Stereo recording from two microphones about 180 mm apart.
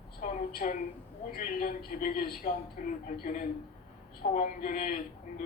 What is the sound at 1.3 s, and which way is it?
A woman's voice, 50° left (ahead or behind).